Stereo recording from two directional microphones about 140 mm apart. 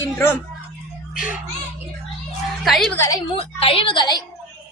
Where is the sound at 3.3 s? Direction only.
40° left (ahead or behind).